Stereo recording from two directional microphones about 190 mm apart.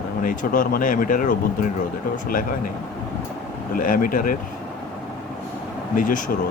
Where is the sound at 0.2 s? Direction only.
45° left (ahead or behind).